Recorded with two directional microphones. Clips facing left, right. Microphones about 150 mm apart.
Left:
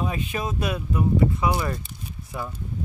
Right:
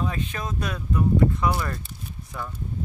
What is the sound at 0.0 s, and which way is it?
Speech, 10° left (ahead or behind).